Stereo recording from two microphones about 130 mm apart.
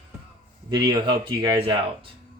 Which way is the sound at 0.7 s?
35° right (ahead or behind).